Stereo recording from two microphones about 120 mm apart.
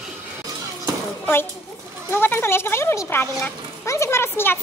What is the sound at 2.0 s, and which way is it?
A child's voice, 20° left (ahead or behind).